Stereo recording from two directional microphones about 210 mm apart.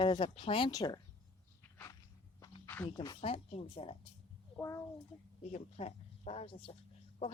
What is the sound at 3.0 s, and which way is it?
Speech, 25° left (ahead or behind).